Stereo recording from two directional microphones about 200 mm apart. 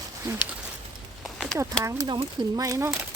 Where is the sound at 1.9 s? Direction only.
20° right (ahead or behind).